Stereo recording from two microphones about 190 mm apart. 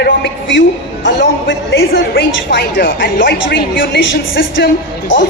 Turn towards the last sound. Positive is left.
turn(degrees=75)  # may be behind; listen again after turning